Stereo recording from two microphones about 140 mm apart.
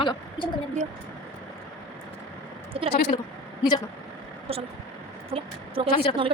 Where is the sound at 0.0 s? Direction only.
35° left (ahead or behind).